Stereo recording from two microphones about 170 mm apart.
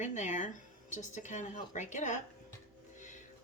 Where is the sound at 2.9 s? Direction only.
45° left (ahead or behind).